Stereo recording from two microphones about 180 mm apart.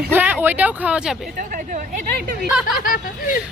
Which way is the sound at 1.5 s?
50° right (ahead or behind).